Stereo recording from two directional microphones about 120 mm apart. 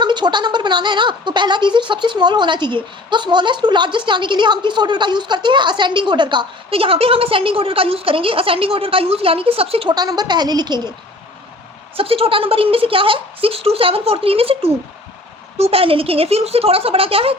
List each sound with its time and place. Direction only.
0.0 s speech: 40° right (ahead or behind)
9.9 s speech: 35° right (ahead or behind)
11.9 s a woman's voice: 50° right (ahead or behind)